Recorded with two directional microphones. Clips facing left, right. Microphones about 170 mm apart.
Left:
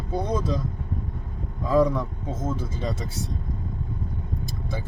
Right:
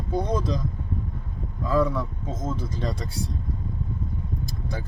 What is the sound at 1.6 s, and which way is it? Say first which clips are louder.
Speech: left 3 dB; 15° left (ahead or behind).